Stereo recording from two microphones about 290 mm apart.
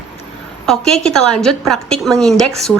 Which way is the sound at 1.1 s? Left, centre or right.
Centre.